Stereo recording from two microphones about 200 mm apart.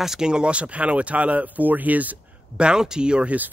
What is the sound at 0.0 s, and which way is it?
Speech, 5° right (ahead or behind).